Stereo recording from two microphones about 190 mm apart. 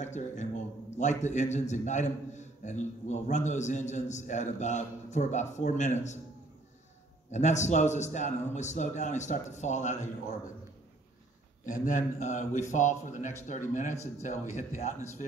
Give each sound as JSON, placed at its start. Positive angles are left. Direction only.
{"t": 0.0, "sound": "a man's voice", "side_deg": 40}
{"t": 7.2, "sound": "a man's voice", "side_deg": 40}
{"t": 11.6, "sound": "a man's voice", "side_deg": 40}